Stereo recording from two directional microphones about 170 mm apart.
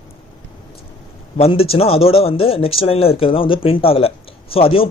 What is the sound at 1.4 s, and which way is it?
Speech, 35° left (ahead or behind).